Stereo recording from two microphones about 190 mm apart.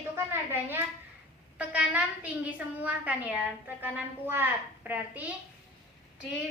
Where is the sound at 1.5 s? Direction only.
5° right (ahead or behind).